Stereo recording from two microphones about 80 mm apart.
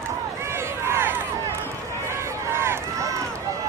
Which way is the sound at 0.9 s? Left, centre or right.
Right.